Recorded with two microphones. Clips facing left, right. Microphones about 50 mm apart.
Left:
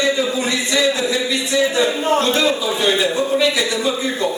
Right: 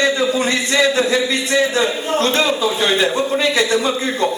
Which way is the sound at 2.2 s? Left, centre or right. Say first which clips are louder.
Right 1 dB; right.